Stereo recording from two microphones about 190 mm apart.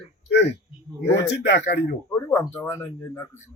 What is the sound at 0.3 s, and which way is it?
Speech, 65° left (ahead or behind).